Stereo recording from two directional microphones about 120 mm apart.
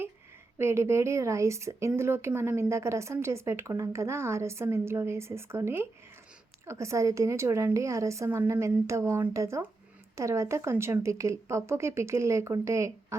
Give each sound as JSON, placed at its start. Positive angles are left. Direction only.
{"t": 0.6, "sound": "a woman's voice", "side_deg": -20}